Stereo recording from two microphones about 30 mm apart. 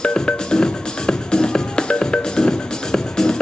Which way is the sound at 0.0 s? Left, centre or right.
Left.